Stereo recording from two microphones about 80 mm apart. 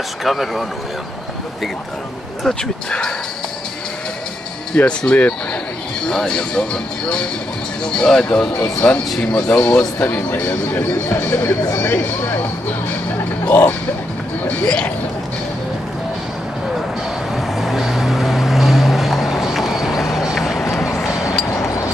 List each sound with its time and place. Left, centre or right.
0.2 s speech: centre
2.4 s speech: centre
4.7 s speech: centre
13.5 s speech: left
17.4 s vehicle: centre
21.5 s a sound: left